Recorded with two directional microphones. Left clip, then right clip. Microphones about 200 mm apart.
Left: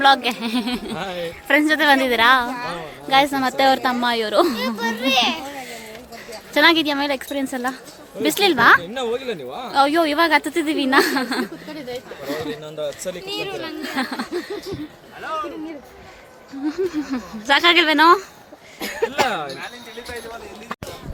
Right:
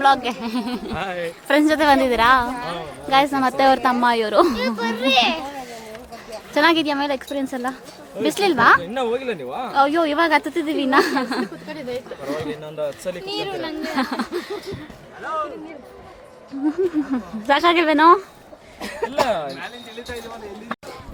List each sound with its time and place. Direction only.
0.0 s a woman's voice: 5° left (ahead or behind)
4.5 s a child's voice: 35° right (ahead or behind)
6.5 s a woman's voice: centre (ahead or behind)
13.2 s a child's voice: 25° right (ahead or behind)
13.8 s speech: centre (ahead or behind)
16.7 s speech: 15° right (ahead or behind)
18.9 s speech: 45° left (ahead or behind)